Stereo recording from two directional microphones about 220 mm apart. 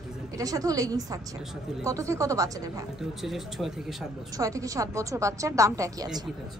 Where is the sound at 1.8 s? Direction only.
15° right (ahead or behind).